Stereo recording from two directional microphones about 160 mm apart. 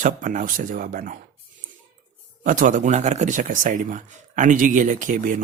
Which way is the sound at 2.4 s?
55° right (ahead or behind).